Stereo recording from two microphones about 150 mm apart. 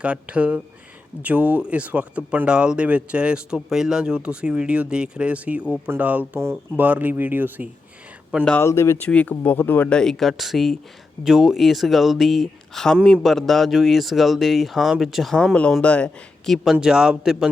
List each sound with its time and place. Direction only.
0.0 s speech: 10° right (ahead or behind)
8.4 s speech: 15° left (ahead or behind)
16.6 s speech: 5° right (ahead or behind)